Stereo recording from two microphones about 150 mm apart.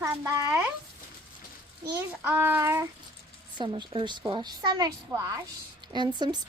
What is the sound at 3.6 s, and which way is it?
A woman's voice, 35° right (ahead or behind).